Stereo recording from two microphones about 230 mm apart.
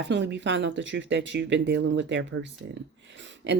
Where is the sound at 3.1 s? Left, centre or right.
Right.